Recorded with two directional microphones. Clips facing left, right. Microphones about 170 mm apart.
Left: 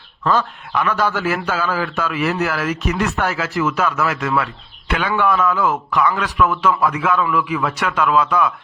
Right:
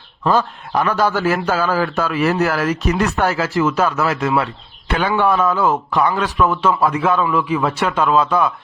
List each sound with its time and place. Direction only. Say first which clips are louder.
0.3 s a man's voice: right 2 dB; 35° right (ahead or behind)